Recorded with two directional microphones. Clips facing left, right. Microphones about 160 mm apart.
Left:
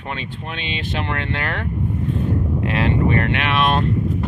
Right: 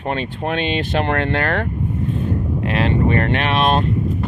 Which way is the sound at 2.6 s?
25° right (ahead or behind).